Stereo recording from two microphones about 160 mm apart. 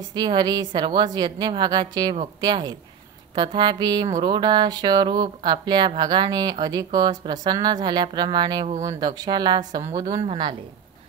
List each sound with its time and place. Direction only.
0.0 s music: 25° right (ahead or behind)
10.2 s speech: 30° right (ahead or behind)